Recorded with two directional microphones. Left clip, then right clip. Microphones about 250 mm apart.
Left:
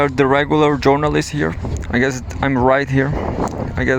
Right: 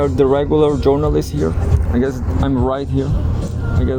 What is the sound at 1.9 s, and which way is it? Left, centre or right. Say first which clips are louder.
Speech: left 2 dB; left.